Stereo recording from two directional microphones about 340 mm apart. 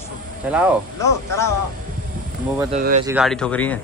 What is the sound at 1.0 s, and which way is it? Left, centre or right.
Speech, centre.